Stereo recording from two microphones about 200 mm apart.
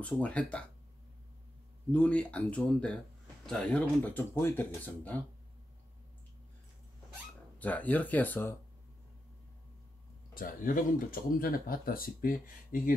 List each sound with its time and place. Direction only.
0.0 s speech: 5° left (ahead or behind)
1.9 s speech: 5° left (ahead or behind)
7.5 s speech: 10° left (ahead or behind)
10.3 s speech: 40° left (ahead or behind)